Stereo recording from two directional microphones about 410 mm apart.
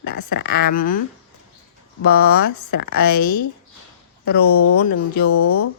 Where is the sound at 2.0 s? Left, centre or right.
Left.